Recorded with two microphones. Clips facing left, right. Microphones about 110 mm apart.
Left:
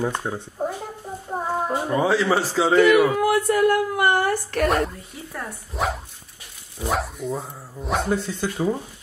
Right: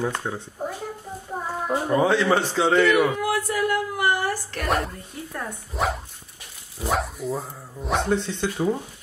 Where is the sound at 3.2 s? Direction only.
60° left (ahead or behind).